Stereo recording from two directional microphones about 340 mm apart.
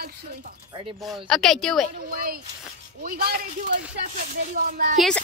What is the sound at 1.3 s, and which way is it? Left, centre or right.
Speech, centre.